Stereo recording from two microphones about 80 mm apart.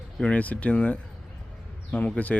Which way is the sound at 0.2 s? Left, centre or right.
Centre.